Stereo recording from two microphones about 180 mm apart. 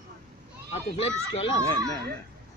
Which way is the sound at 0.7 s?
35° left (ahead or behind).